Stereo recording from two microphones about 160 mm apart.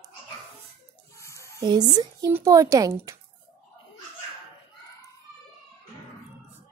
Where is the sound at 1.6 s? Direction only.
25° right (ahead or behind).